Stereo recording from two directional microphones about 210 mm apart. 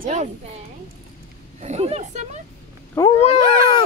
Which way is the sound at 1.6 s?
30° right (ahead or behind).